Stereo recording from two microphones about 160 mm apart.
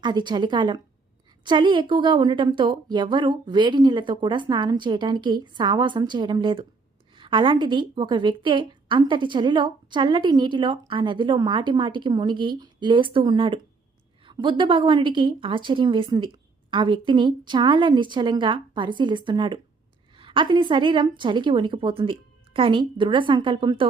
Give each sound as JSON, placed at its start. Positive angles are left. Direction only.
{"t": 0.0, "sound": "a woman's voice", "side_deg": -30}